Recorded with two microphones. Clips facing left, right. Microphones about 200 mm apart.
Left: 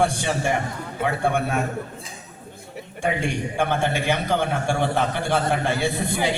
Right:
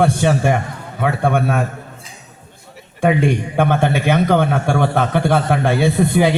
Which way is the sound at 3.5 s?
55° right (ahead or behind).